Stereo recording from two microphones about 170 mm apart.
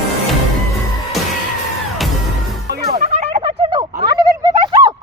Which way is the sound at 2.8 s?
45° right (ahead or behind).